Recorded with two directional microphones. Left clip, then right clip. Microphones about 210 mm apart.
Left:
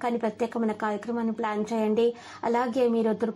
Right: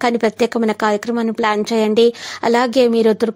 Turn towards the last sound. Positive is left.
turn(degrees=-45)  # may be behind; listen again after turning